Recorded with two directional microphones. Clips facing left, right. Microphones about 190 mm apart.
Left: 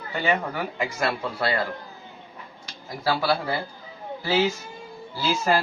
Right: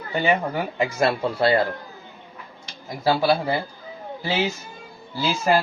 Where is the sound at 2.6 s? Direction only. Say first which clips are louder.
Right 4 dB; 20° right (ahead or behind).